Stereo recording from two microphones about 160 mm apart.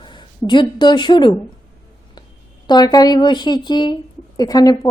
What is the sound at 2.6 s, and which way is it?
A woman's voice, 25° left (ahead or behind).